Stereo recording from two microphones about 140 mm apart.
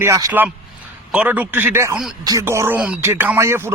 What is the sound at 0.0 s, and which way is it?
Speech, 20° right (ahead or behind).